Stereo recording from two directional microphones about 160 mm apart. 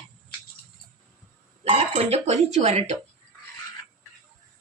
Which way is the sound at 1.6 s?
40° right (ahead or behind).